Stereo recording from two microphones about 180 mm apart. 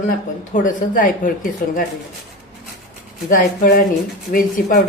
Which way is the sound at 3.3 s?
50° left (ahead or behind).